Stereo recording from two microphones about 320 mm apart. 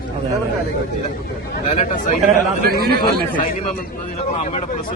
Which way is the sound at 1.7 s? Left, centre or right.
Left.